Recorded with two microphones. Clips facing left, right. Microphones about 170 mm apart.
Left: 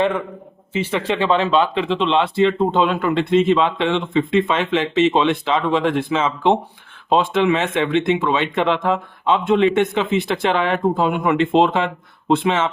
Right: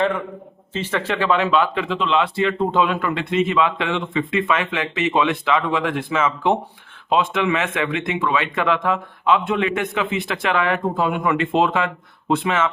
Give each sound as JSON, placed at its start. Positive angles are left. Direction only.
{"t": 0.7, "sound": "speech", "side_deg": 15}